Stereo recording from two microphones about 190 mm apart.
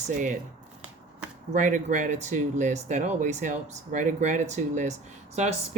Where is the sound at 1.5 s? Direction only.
40° right (ahead or behind).